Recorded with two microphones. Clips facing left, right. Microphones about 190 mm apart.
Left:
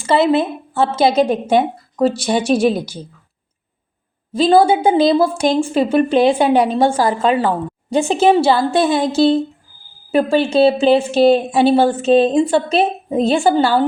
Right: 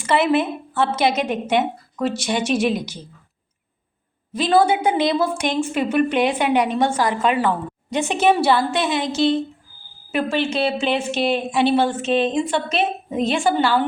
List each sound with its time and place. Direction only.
0.0 s a woman's voice: 25° left (ahead or behind)
4.4 s a woman's voice: 30° left (ahead or behind)